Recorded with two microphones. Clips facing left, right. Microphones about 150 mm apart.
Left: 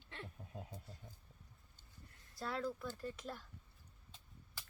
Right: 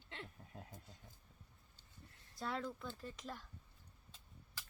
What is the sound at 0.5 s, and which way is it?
Speech, 20° left (ahead or behind).